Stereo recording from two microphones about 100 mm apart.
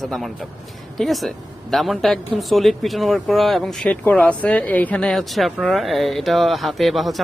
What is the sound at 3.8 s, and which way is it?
Speech, 15° left (ahead or behind).